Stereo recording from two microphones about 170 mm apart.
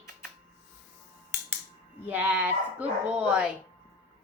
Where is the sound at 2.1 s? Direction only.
10° right (ahead or behind).